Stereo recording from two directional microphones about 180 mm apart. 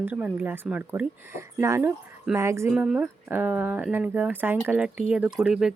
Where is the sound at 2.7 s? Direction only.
5° right (ahead or behind).